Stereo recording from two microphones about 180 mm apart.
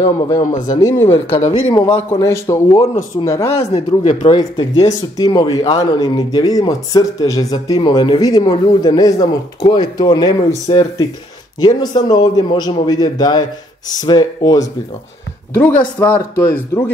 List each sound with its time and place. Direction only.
0.4 s speech: 45° left (ahead or behind)
0.7 s speech: 20° left (ahead or behind)
1.1 s speech: 35° left (ahead or behind)
1.7 s speech: 20° left (ahead or behind)
3.7 s speech: 40° left (ahead or behind)
4.3 s speech: 20° left (ahead or behind)
15.5 s speech: 10° left (ahead or behind)